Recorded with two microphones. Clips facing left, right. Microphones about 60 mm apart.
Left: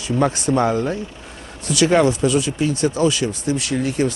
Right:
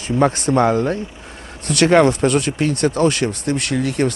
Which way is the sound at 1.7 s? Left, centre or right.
Right.